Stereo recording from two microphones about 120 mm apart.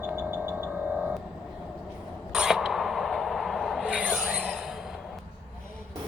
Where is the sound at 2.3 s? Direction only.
5° right (ahead or behind).